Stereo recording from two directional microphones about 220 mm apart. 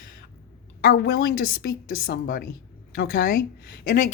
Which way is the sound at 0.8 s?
45° left (ahead or behind).